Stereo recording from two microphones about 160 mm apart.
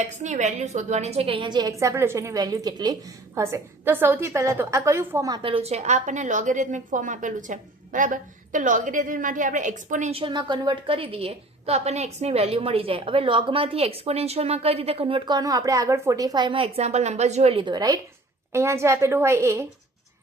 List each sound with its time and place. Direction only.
0.0 s a woman's voice: 50° right (ahead or behind); by 5.4 s 20° right (ahead or behind)
5.4 s a woman's voice: 35° right (ahead or behind); by 10.2 s 50° right (ahead or behind)
10.2 s a woman's voice: 30° right (ahead or behind)